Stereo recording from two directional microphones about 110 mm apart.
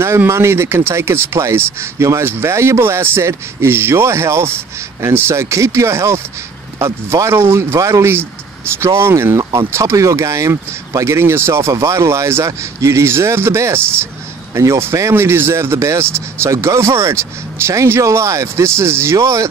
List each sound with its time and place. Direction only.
0.0 s speech: 25° right (ahead or behind)